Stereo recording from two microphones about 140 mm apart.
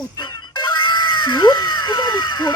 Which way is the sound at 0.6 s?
35° left (ahead or behind).